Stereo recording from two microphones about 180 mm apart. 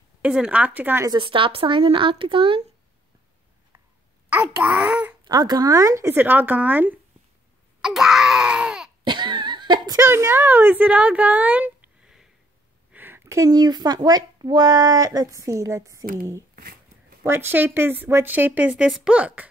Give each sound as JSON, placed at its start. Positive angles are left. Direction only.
{"t": 0.2, "sound": "a woman's voice", "side_deg": -5}
{"t": 1.1, "sound": "speech", "side_deg": -30}
{"t": 4.3, "sound": "a woman's voice", "side_deg": -5}
{"t": 5.2, "sound": "a woman's voice", "side_deg": -20}
{"t": 9.0, "sound": "a sound", "side_deg": -25}
{"t": 10.0, "sound": "speech", "side_deg": -15}
{"t": 16.5, "sound": "a sound", "side_deg": -55}
{"t": 17.2, "sound": "a woman's voice", "side_deg": -15}